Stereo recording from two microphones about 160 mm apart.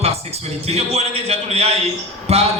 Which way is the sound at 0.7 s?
40° right (ahead or behind).